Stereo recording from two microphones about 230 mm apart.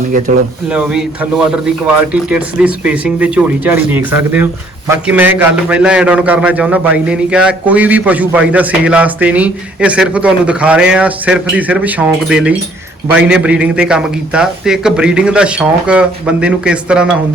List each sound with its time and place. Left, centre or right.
0.3 s speech: right
0.7 s a man's voice: centre